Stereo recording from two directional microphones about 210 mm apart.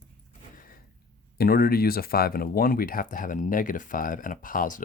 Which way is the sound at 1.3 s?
45° left (ahead or behind).